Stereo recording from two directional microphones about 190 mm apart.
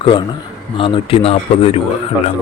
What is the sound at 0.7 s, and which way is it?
Speech, 25° left (ahead or behind).